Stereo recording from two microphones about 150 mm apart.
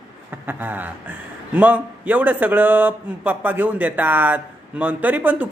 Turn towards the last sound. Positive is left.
turn(degrees=-10)  # may be behind; listen again after turning